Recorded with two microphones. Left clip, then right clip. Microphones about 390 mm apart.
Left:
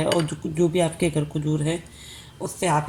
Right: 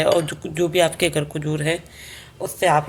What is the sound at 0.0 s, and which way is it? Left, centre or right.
Speech, right.